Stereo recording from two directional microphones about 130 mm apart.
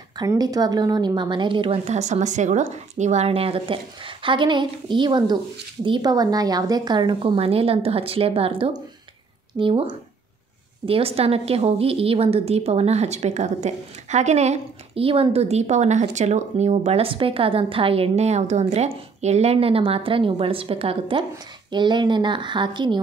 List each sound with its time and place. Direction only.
0.3 s a woman's voice: 30° right (ahead or behind)
1.9 s a woman's voice: 60° right (ahead or behind); by 22.9 s 35° right (ahead or behind)